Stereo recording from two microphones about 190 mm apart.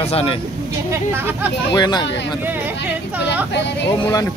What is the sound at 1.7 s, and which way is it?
Speech, 20° left (ahead or behind).